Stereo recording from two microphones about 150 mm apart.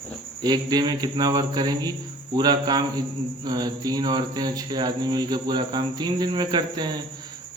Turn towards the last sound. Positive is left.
turn(degrees=-30)  # may be behind; listen again after turning